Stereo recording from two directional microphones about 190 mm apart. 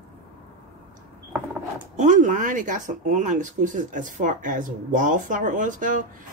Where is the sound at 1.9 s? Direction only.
40° right (ahead or behind).